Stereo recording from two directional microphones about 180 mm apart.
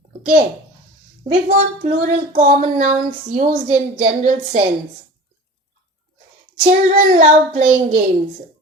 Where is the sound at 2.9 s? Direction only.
25° right (ahead or behind).